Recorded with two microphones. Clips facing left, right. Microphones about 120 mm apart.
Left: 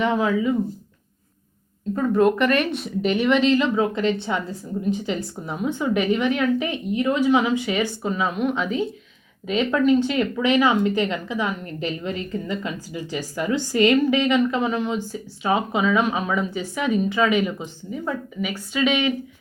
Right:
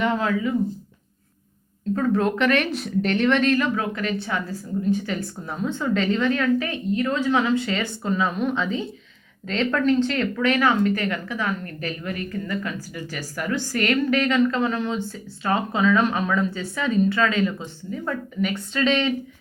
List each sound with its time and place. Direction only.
0.0 s speech: 15° left (ahead or behind)
2.0 s speech: 5° left (ahead or behind)